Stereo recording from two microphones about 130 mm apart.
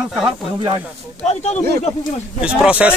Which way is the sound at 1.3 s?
55° left (ahead or behind).